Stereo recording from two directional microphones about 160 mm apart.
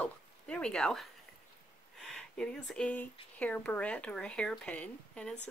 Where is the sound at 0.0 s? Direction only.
5° left (ahead or behind).